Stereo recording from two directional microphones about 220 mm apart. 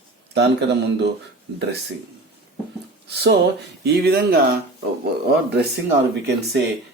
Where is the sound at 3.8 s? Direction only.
45° right (ahead or behind).